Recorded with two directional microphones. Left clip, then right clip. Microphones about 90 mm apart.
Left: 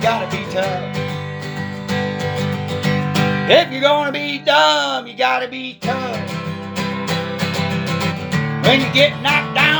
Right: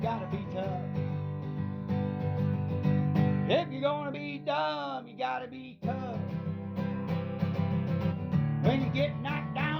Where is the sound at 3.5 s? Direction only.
45° left (ahead or behind).